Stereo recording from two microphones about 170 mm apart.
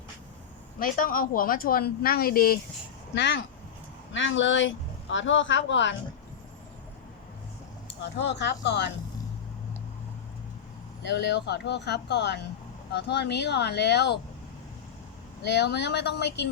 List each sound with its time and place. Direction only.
0.8 s speech: 55° left (ahead or behind)
3.2 s speech: 90° left
8.0 s speech: 90° left
11.1 s speech: 90° left
15.4 s speech: 90° left